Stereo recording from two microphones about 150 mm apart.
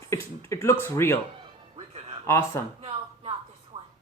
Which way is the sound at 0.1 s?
20° left (ahead or behind).